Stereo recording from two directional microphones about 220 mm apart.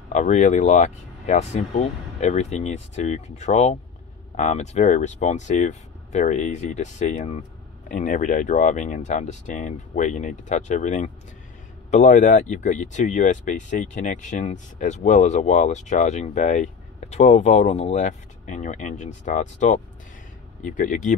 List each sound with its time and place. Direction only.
0.1 s speech: 35° left (ahead or behind)